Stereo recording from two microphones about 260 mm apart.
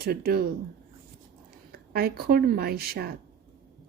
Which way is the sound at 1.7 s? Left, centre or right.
Right.